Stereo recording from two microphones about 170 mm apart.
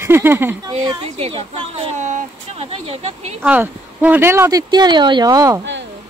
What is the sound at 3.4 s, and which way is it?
Speech, 10° right (ahead or behind).